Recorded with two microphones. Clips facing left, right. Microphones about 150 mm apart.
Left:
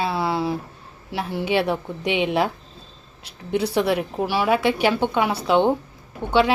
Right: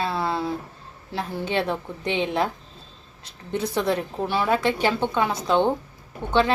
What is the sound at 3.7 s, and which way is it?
A woman's voice, 10° left (ahead or behind).